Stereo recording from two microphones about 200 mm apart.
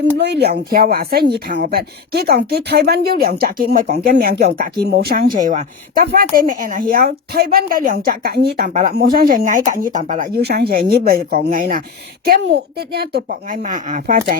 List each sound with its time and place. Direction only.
0.2 s speech: 55° right (ahead or behind)
12.2 s speech: 55° right (ahead or behind)
13.6 s speech: 40° right (ahead or behind)